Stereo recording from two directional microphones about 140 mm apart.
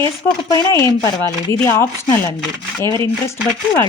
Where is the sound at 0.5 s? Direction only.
25° left (ahead or behind).